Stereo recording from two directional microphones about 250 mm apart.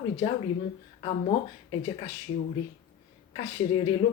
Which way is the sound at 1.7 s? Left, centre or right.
Left.